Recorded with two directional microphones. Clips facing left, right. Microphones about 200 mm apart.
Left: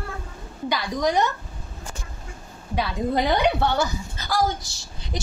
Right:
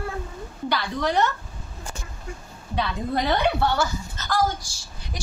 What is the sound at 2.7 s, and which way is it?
A woman's voice, 10° left (ahead or behind).